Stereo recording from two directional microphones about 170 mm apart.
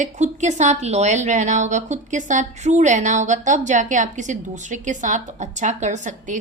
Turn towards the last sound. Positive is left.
turn(degrees=-45)  # may be behind; listen again after turning